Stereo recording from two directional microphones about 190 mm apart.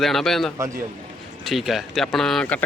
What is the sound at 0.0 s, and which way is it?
A man's voice, centre (ahead or behind).